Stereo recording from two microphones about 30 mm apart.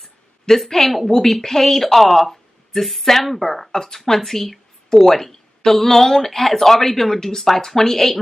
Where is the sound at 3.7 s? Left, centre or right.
Centre.